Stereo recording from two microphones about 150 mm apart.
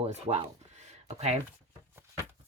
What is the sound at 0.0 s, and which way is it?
Speech, 45° right (ahead or behind).